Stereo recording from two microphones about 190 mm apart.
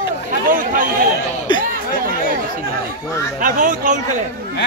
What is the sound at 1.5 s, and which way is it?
Chatter, 25° left (ahead or behind).